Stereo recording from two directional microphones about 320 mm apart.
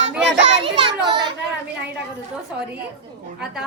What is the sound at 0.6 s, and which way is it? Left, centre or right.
Speech, centre.